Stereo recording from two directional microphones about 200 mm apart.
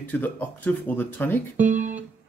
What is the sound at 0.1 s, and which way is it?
Speech, 10° left (ahead or behind).